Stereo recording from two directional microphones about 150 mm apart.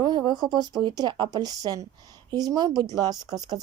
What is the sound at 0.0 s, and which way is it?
Speech, 30° right (ahead or behind).